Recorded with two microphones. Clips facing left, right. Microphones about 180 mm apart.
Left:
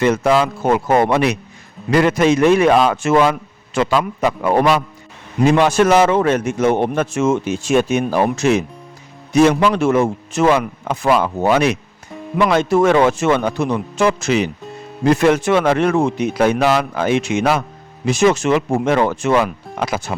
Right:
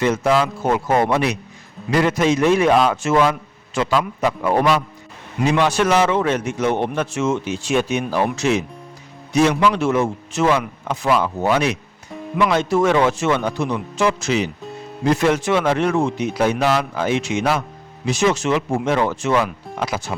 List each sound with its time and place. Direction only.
0.0 s a man's voice: 60° left (ahead or behind)
5.5 s a man's voice: 50° left (ahead or behind)